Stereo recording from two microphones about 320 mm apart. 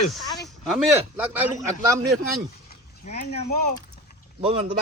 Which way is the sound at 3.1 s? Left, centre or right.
Centre.